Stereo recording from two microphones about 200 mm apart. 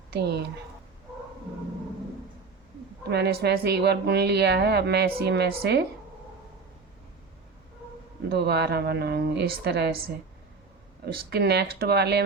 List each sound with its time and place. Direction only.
0.1 s a woman's voice: 55° right (ahead or behind)
3.0 s a woman's voice: 55° right (ahead or behind)
8.3 s a woman's voice: 55° right (ahead or behind)
11.0 s a woman's voice: 50° right (ahead or behind)